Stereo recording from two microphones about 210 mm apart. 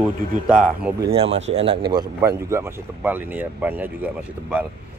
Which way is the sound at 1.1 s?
30° right (ahead or behind).